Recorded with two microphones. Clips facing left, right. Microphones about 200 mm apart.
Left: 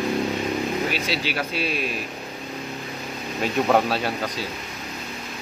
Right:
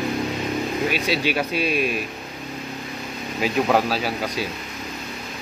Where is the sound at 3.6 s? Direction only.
Centre (ahead or behind).